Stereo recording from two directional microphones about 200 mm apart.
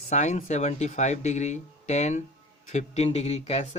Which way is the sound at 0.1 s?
35° left (ahead or behind).